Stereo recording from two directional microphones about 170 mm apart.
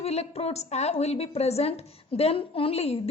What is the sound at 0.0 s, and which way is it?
A woman's voice, 40° left (ahead or behind).